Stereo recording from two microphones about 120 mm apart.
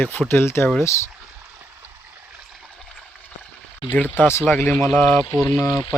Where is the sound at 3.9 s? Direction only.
15° left (ahead or behind).